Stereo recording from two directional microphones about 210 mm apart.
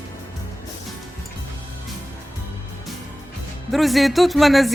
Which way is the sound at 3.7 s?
Centre (ahead or behind).